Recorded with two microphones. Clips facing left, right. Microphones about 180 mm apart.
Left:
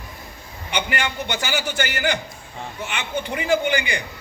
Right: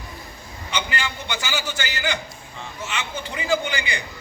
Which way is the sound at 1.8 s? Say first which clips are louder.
Left 4 dB; 55° left (ahead or behind).